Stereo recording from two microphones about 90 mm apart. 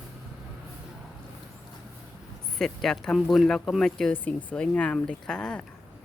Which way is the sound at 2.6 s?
5° left (ahead or behind).